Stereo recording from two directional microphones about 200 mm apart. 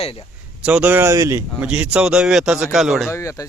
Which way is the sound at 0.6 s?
5° right (ahead or behind).